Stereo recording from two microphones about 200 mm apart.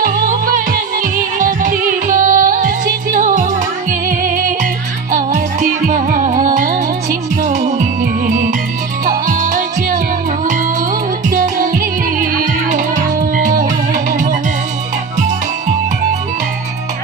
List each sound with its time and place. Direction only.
0.0 s music: 40° right (ahead or behind)